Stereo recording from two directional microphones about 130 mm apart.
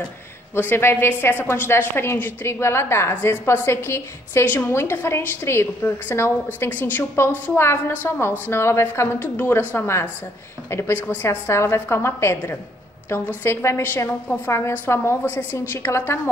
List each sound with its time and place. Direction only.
0.6 s a woman's voice: 15° left (ahead or behind)